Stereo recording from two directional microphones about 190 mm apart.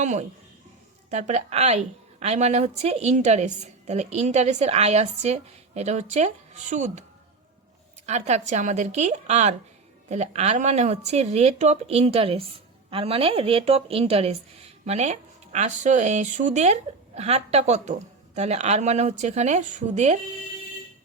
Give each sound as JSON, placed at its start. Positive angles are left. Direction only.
{"t": 0.0, "sound": "a woman's voice", "side_deg": -40}
{"t": 8.0, "sound": "a woman's voice", "side_deg": -35}